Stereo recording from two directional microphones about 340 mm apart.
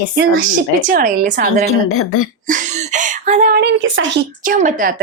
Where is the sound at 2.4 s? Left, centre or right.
Right.